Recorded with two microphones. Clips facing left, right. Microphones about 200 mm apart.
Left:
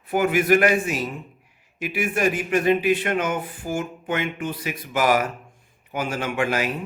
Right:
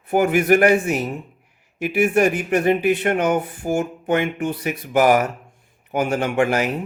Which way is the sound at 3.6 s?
45° right (ahead or behind).